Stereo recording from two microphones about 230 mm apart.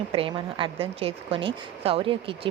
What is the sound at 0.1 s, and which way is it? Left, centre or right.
Speech, right.